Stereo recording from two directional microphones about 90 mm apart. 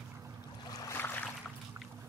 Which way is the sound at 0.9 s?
20° left (ahead or behind).